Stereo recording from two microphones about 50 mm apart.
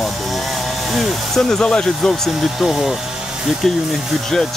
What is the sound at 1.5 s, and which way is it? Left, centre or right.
Speech, centre.